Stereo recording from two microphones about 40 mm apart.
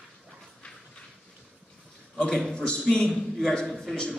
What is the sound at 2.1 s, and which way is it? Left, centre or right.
Speech, centre.